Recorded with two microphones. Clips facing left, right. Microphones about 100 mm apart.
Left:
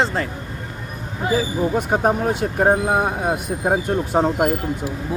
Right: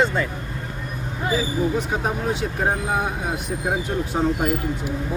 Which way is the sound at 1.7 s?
50° left (ahead or behind).